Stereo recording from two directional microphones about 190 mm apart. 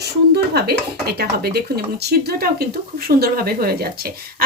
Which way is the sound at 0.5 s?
55° right (ahead or behind).